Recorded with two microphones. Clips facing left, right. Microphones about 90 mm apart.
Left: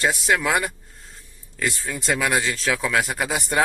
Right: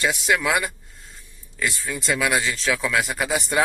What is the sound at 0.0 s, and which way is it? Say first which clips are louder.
A man's voice: left 1 dB; 40° left (ahead or behind).